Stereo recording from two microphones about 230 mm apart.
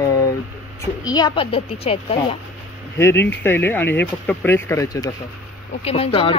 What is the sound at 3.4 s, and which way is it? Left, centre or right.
Speech, centre.